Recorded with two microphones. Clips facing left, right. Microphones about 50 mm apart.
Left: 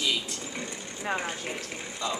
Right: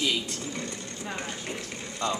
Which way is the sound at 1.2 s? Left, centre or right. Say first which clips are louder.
Left 2 dB; centre.